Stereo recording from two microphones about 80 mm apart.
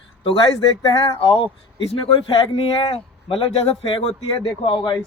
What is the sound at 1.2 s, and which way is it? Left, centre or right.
Speech, left.